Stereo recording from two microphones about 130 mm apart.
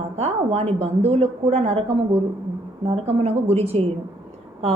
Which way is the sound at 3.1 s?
50° right (ahead or behind).